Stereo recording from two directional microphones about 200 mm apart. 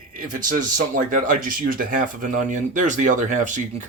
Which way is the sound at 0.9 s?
40° right (ahead or behind).